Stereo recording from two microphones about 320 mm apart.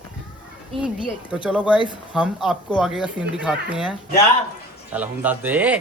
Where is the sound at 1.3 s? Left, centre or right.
Centre.